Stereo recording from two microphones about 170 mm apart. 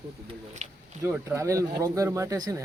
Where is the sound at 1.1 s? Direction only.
15° right (ahead or behind).